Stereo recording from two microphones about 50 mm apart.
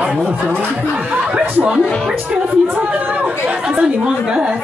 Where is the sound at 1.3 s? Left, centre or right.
Right.